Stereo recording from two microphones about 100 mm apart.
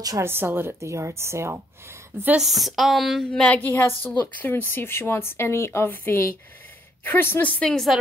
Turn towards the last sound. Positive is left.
turn(degrees=10)  # may be behind; listen again after turning